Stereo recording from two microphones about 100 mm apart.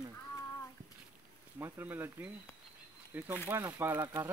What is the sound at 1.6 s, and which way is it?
Speech, 20° right (ahead or behind).